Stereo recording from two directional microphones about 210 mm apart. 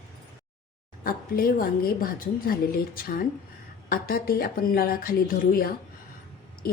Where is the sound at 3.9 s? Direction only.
45° left (ahead or behind).